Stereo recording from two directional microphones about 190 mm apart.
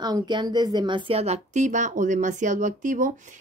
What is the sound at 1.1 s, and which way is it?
Speech, 35° right (ahead or behind).